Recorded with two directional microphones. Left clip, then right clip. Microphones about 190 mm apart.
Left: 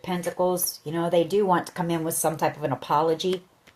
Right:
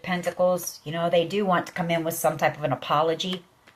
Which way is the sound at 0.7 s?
55° left (ahead or behind).